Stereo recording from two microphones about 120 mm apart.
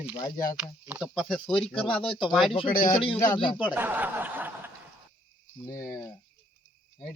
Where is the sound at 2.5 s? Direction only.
50° left (ahead or behind).